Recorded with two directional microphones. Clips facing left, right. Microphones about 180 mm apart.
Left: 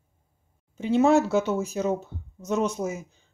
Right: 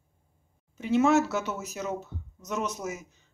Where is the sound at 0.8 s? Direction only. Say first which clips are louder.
Left 3 dB; 30° left (ahead or behind).